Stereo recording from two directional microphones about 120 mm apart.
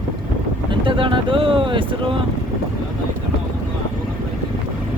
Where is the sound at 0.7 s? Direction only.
45° right (ahead or behind).